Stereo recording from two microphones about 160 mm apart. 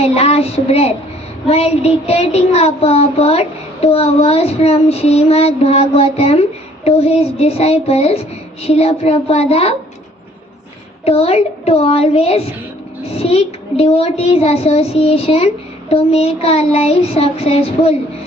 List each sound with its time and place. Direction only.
0.0 s child singing: 40° left (ahead or behind)
11.0 s child singing: 40° left (ahead or behind)